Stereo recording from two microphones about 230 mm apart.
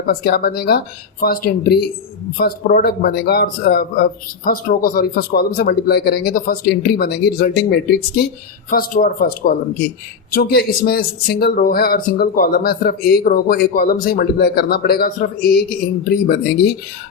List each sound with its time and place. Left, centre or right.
0.1 s speech: left